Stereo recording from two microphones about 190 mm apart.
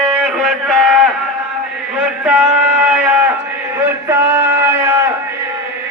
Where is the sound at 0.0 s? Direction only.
5° right (ahead or behind).